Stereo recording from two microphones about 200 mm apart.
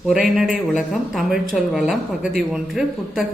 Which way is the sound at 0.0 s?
5° right (ahead or behind).